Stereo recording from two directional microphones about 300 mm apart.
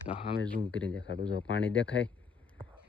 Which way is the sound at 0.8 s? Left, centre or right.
Centre.